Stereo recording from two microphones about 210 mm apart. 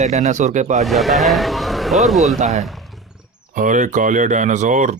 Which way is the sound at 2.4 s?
30° right (ahead or behind).